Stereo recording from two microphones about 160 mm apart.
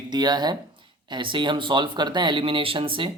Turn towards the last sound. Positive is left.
turn(degrees=-35)  # may be behind; listen again after turning